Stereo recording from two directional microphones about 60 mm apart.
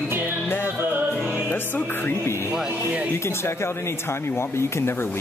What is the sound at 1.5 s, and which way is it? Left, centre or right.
Speech, left.